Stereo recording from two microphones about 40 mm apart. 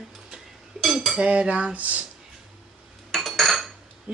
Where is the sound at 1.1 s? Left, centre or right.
Right.